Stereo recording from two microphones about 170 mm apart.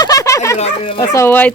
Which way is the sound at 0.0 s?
20° left (ahead or behind).